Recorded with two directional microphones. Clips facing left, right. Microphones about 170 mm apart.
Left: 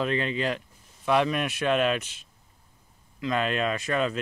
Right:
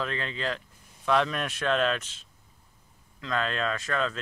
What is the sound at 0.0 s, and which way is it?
Speech, 20° left (ahead or behind).